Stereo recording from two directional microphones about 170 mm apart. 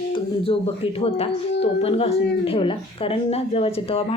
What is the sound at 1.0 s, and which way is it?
A woman's voice, 35° left (ahead or behind).